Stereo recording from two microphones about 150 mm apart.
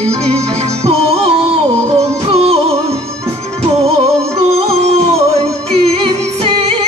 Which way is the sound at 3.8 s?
45° right (ahead or behind).